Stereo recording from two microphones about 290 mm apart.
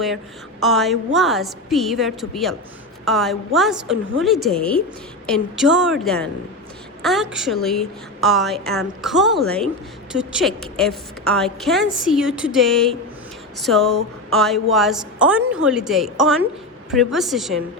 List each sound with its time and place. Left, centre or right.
0.6 s a woman's voice: centre